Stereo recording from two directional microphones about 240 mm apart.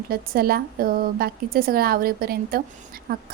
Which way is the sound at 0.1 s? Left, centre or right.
Right.